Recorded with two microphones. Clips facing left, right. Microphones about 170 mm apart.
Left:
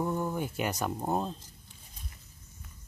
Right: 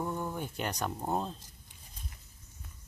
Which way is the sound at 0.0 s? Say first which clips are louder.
Left 4 dB; 10° left (ahead or behind).